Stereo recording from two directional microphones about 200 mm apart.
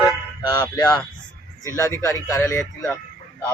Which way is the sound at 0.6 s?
10° left (ahead or behind).